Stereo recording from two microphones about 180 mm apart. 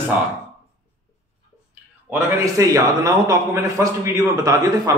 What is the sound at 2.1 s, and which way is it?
A man's voice, 15° right (ahead or behind).